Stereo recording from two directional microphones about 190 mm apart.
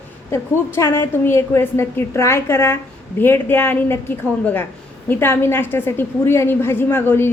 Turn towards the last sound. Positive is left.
turn(degrees=10)  # may be behind; listen again after turning